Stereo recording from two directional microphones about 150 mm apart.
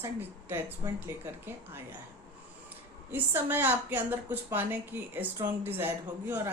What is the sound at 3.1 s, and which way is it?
A woman's voice, 15° right (ahead or behind).